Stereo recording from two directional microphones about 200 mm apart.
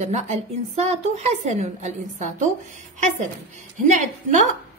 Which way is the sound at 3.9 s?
35° right (ahead or behind).